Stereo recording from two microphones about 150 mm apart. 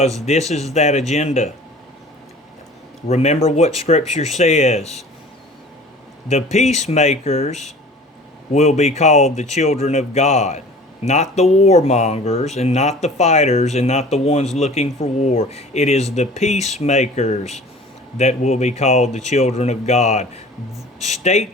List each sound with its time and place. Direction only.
0.3 s speech: 45° left (ahead or behind)
3.1 s speech: 45° left (ahead or behind)
6.2 s speech: 50° left (ahead or behind)